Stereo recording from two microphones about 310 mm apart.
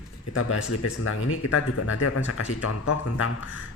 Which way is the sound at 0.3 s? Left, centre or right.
Left.